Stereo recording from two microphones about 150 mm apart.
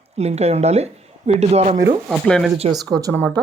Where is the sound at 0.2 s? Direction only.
45° right (ahead or behind).